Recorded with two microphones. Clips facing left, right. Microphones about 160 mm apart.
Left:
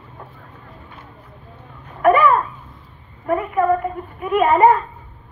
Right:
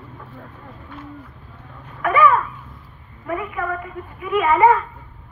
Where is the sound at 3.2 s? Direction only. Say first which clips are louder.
Left 8 dB; 40° left (ahead or behind).